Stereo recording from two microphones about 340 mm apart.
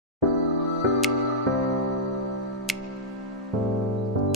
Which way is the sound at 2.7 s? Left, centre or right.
Centre.